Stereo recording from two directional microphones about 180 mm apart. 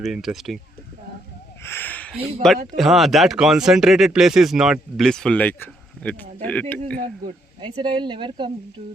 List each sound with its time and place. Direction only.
0.0 s speech: centre (ahead or behind)
1.6 s a sound: 10° left (ahead or behind)
2.1 s speech: centre (ahead or behind)
7.6 s speech: 25° right (ahead or behind)